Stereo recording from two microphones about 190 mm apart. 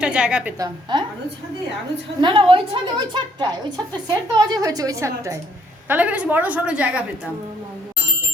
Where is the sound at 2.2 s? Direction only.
25° right (ahead or behind); by 7.0 s 5° right (ahead or behind).